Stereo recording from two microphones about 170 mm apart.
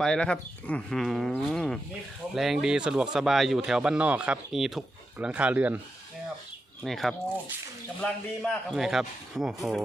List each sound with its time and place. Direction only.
0.0 s speech: 5° left (ahead or behind)
6.8 s speech: centre (ahead or behind)